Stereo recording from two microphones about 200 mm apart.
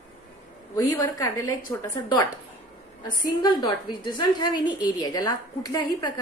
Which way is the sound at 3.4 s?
20° left (ahead or behind).